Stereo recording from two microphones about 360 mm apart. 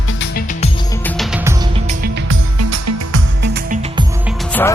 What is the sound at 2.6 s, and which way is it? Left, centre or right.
Music, right.